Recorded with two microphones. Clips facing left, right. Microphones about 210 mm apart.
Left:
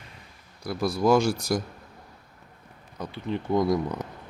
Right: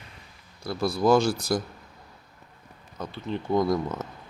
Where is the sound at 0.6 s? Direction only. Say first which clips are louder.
Even; 15° left (ahead or behind).